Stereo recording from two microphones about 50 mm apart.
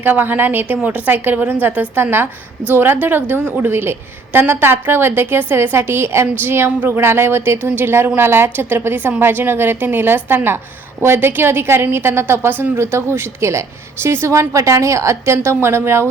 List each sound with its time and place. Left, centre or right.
0.0 s a woman's voice: right
0.8 s a woman's voice: right